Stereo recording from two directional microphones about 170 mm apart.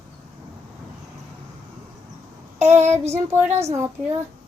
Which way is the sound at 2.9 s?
15° right (ahead or behind).